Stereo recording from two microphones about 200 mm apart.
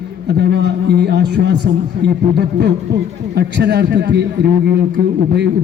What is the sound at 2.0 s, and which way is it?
A man's voice, 60° right (ahead or behind).